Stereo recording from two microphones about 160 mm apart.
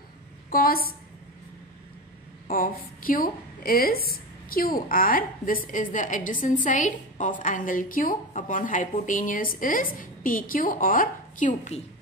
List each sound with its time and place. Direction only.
0.5 s a woman's voice: 65° left (ahead or behind)
2.4 s a woman's voice: 60° left (ahead or behind)